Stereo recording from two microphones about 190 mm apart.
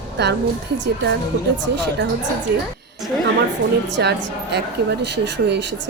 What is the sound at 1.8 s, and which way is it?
Speech, 65° right (ahead or behind).